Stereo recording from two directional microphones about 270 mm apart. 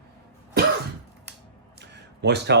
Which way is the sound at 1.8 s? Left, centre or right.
Right.